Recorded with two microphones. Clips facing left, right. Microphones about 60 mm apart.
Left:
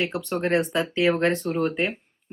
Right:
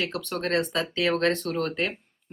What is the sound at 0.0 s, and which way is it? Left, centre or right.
Speech, centre.